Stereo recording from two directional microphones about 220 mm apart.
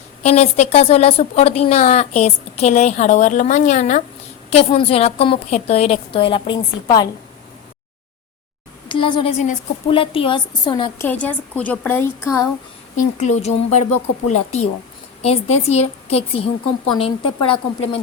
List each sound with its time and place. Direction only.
0.2 s a woman's voice: 30° left (ahead or behind)
8.9 s a woman's voice: 20° left (ahead or behind)
11.0 s a woman's voice: 10° left (ahead or behind)
13.0 s a woman's voice: 30° left (ahead or behind)